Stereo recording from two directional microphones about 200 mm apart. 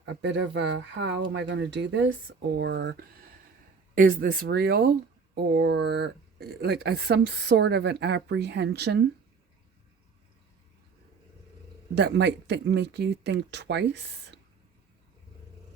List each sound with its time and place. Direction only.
0.0 s speech: 60° right (ahead or behind)
11.9 s speech: 60° right (ahead or behind)